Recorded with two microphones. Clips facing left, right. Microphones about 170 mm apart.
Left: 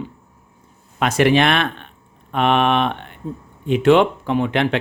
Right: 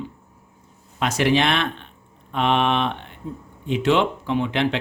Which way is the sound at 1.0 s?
55° left (ahead or behind).